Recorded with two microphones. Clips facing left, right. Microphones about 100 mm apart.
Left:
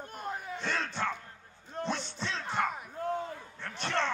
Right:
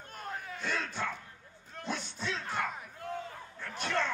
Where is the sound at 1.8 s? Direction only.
35° left (ahead or behind).